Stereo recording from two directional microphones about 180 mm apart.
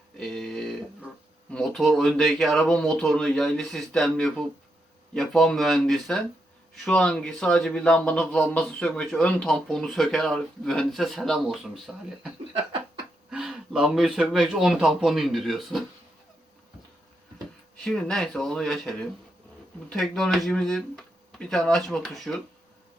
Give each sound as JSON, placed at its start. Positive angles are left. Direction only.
{"t": 0.2, "sound": "speech", "side_deg": 0}
{"t": 13.3, "sound": "speech", "side_deg": -5}
{"t": 17.8, "sound": "speech", "side_deg": 5}